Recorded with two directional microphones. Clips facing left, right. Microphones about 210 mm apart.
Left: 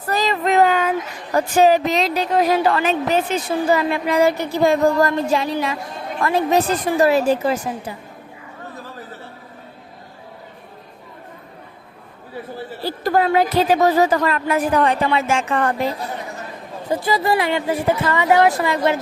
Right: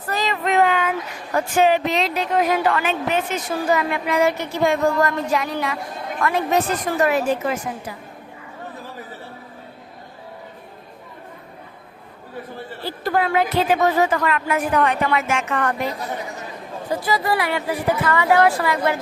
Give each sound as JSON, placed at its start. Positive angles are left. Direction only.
{"t": 0.1, "sound": "child singing", "side_deg": 35}
{"t": 1.3, "sound": "a woman's voice", "side_deg": 35}
{"t": 13.1, "sound": "a woman's voice", "side_deg": 40}
{"t": 16.9, "sound": "speech", "side_deg": 30}